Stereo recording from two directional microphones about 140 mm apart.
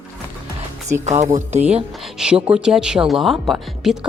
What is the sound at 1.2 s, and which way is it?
Speech, 55° right (ahead or behind).